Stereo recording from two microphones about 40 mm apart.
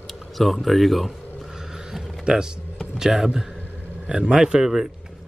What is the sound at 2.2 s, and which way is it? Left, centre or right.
A man's voice, centre.